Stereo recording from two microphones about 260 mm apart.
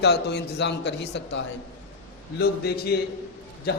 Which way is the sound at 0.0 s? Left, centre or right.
Left.